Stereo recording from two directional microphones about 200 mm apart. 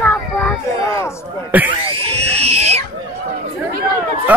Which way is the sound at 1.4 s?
10° right (ahead or behind).